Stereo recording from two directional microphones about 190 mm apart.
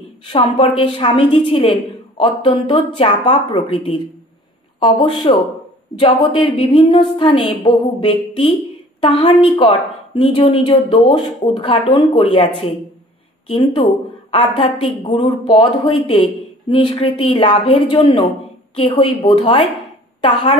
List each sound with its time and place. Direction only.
0.3 s a woman's voice: 30° left (ahead or behind)